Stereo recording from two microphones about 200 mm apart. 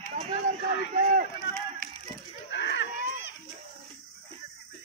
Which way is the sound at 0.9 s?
45° right (ahead or behind).